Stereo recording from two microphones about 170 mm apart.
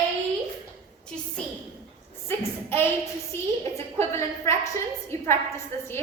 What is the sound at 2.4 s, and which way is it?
A woman's voice, 15° left (ahead or behind).